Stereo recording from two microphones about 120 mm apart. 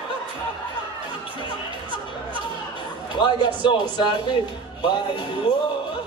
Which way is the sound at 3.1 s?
40° left (ahead or behind).